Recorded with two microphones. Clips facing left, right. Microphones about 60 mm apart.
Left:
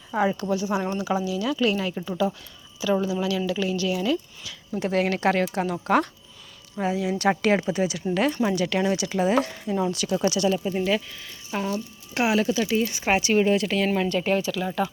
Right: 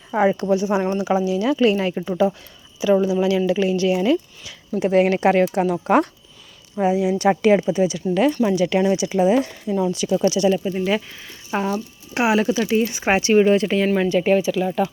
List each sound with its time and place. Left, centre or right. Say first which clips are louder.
0.1 s speech: right 6 dB; right
2.8 s speech: right 7 dB; centre
9.9 s speech: right 5 dB; centre
11.1 s speech: right 5 dB; right
13.7 s speech: right 5 dB; centre